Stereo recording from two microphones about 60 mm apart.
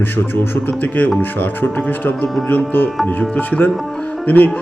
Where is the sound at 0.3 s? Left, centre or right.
Left.